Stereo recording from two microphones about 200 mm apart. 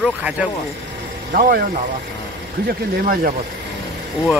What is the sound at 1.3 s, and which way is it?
Speech, 45° right (ahead or behind).